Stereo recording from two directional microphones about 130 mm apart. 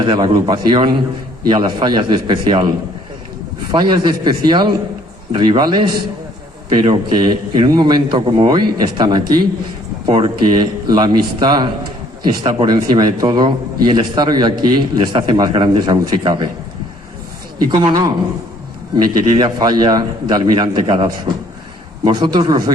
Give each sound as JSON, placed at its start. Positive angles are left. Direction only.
{"t": 0.0, "sound": "a man's voice", "side_deg": -35}
{"t": 17.7, "sound": "a man's voice", "side_deg": -30}
{"t": 19.3, "sound": "a man's voice", "side_deg": -30}